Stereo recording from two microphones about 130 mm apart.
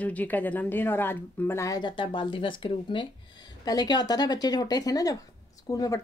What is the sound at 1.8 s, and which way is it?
Speech, 35° left (ahead or behind).